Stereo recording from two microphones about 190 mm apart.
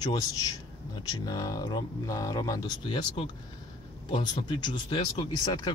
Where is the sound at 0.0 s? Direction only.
20° left (ahead or behind).